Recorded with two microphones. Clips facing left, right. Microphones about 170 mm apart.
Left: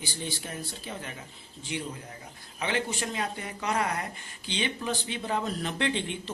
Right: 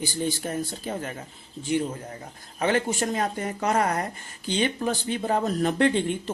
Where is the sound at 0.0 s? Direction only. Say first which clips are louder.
Right 9 dB; 45° right (ahead or behind).